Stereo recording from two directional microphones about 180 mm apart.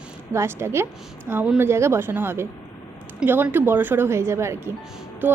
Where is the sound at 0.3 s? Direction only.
15° right (ahead or behind).